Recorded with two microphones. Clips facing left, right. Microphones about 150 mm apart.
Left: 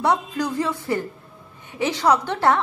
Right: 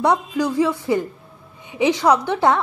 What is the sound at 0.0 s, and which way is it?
A woman's voice, 10° right (ahead or behind).